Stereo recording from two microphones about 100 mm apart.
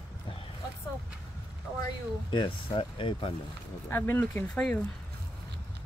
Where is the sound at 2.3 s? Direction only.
55° left (ahead or behind).